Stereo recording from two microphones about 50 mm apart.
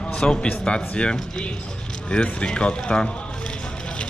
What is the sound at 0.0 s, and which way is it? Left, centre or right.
A man's voice, centre.